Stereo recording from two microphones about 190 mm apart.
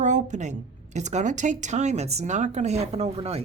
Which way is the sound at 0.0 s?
40° right (ahead or behind).